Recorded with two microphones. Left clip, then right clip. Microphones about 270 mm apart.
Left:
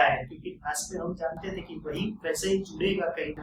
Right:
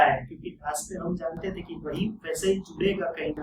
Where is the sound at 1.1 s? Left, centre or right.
Centre.